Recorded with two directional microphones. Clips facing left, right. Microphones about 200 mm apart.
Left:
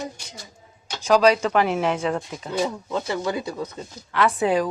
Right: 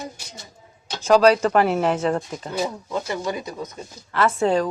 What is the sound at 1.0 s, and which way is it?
Speech, 10° left (ahead or behind).